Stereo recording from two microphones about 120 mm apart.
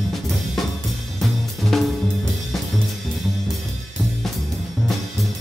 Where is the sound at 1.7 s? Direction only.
Centre (ahead or behind).